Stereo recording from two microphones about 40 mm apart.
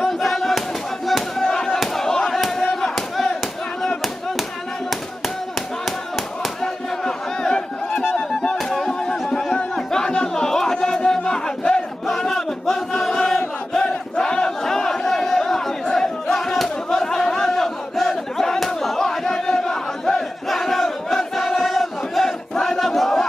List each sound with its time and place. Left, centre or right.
0.2 s a sound: centre
1.8 s battle cry: centre
6.6 s crowd: centre
8.6 s a sound: centre
9.0 s chatter: centre
11.1 s music: centre
12.2 s chant: centre
13.7 s crowd: centre
18.0 s battle cry: centre